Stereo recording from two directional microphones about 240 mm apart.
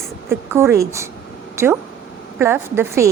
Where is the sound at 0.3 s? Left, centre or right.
Centre.